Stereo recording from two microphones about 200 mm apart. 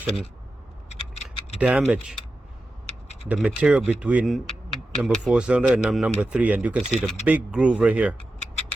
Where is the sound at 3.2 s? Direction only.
5° right (ahead or behind).